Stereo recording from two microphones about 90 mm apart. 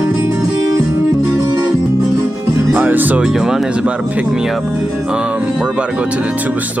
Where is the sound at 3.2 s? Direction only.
5° right (ahead or behind).